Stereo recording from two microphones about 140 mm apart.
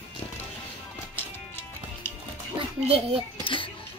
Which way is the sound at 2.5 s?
45° right (ahead or behind).